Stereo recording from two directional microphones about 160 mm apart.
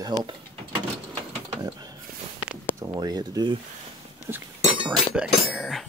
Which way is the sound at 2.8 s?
25° right (ahead or behind).